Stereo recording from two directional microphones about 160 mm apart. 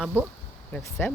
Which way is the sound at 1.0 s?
15° left (ahead or behind).